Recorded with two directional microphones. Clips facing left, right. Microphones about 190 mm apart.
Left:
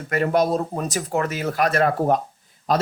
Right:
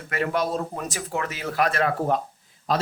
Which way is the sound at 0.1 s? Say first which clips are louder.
Left 5 dB; 40° left (ahead or behind).